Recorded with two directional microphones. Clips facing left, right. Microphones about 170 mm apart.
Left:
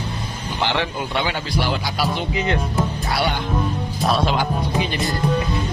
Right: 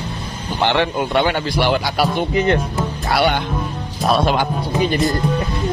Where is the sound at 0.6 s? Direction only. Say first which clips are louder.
Right 6 dB; 55° right (ahead or behind).